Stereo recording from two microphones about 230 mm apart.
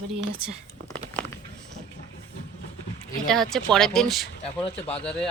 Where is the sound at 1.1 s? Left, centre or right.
Centre.